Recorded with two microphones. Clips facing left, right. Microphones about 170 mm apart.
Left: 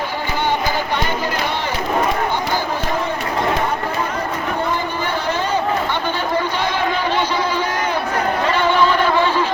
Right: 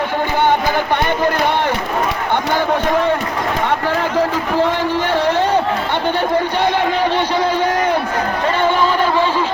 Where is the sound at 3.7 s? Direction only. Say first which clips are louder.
Right 4 dB; 90° right; by 7.9 s 65° right (ahead or behind).